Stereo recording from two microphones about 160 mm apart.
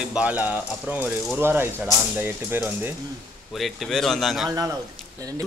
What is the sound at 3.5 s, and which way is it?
Speech, centre (ahead or behind).